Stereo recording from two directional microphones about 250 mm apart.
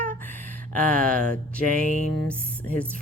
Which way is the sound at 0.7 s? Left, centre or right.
Right.